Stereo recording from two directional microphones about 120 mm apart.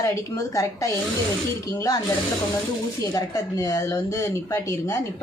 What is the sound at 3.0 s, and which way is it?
Speech, 30° left (ahead or behind).